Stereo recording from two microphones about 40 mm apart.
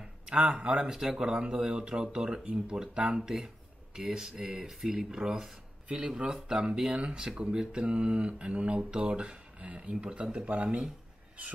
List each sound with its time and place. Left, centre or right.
0.3 s speech: right